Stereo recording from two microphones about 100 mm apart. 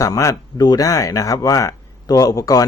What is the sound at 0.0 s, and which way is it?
Speech, 35° left (ahead or behind).